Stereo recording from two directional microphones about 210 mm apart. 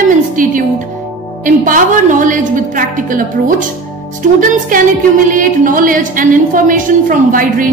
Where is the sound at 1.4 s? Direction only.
40° right (ahead or behind).